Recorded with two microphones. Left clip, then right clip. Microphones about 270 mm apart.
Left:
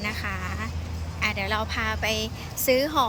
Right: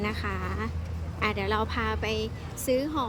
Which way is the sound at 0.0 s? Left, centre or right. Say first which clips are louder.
Left 2 dB; centre.